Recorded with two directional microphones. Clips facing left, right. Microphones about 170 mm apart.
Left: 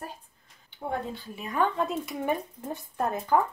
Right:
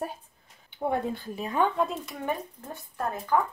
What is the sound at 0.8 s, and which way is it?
Speech, 60° right (ahead or behind).